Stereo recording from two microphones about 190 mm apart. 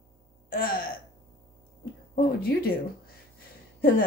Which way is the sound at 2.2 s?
50° left (ahead or behind).